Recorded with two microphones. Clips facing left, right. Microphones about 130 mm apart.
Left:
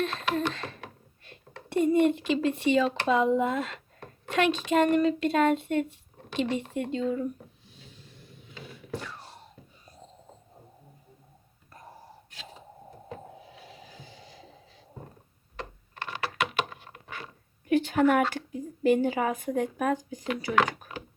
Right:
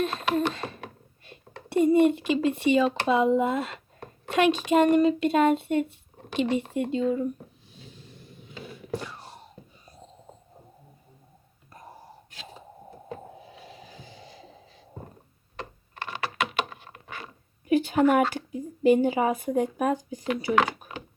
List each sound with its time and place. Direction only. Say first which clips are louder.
0.0 s a woman's voice: right 3 dB; 10° right (ahead or behind)
9.0 s wail: right 1 dB; 10° right (ahead or behind)
15.5 s computer keyboard: right 1 dB; 5° right (ahead or behind)
17.7 s a woman's voice: right 2 dB; 10° right (ahead or behind)